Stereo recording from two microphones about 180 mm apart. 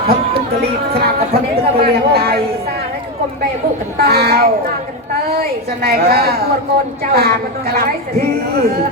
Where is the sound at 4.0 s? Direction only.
60° right (ahead or behind).